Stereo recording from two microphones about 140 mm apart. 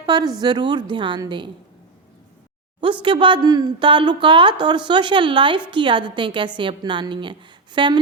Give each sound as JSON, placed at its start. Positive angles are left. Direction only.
{"t": 0.0, "sound": "a sound", "side_deg": -30}
{"t": 0.4, "sound": "speech", "side_deg": -35}
{"t": 2.8, "sound": "speech", "side_deg": -35}